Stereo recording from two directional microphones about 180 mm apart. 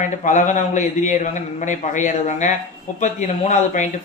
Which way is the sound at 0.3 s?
45° left (ahead or behind).